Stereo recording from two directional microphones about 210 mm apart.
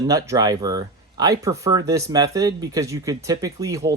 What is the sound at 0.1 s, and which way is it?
Speech, 15° right (ahead or behind).